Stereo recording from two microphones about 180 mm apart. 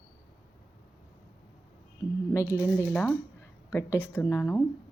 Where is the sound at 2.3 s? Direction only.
15° left (ahead or behind).